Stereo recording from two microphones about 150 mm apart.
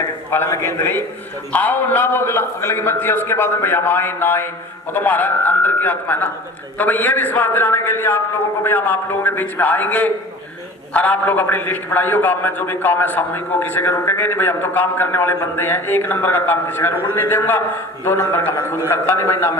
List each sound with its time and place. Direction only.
0.3 s a man's voice: 15° left (ahead or behind)